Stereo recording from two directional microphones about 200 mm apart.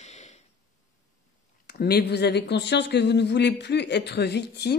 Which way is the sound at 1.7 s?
50° left (ahead or behind).